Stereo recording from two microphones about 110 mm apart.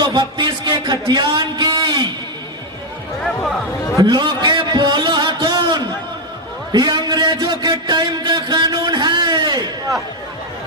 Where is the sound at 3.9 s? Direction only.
40° right (ahead or behind).